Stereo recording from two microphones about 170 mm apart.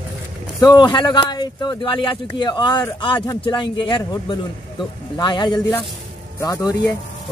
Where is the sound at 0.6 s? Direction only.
25° left (ahead or behind).